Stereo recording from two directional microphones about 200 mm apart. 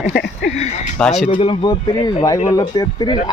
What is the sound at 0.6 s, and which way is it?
Speech, 35° left (ahead or behind).